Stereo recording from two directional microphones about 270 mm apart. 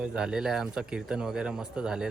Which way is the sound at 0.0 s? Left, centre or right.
Centre.